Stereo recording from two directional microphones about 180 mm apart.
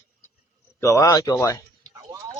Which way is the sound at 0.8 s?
20° left (ahead or behind).